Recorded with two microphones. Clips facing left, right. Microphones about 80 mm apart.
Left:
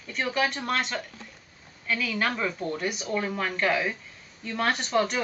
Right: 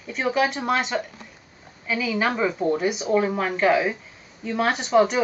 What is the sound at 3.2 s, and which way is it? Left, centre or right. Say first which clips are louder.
A woman's voice: right 5 dB; centre.